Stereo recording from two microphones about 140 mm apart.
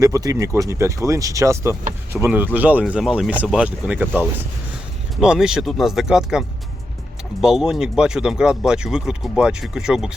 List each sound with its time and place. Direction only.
0.0 s speech: 25° right (ahead or behind); by 6.4 s 5° right (ahead or behind)
7.4 s speech: 5° right (ahead or behind)